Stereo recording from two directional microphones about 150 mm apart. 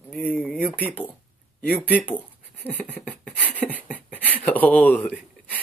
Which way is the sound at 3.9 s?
10° right (ahead or behind).